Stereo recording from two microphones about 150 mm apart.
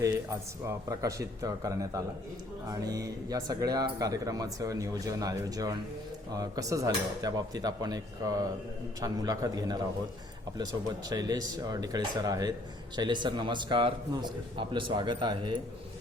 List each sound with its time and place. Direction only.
0.7 s speech: 20° right (ahead or behind)
11.1 s a man's voice: 25° right (ahead or behind)